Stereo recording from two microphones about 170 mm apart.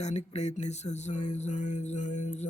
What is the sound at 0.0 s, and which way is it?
Music, 40° left (ahead or behind).